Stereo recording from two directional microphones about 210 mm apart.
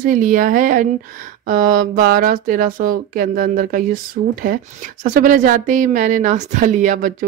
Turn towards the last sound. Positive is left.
turn(degrees=-40)  # may be behind; listen again after turning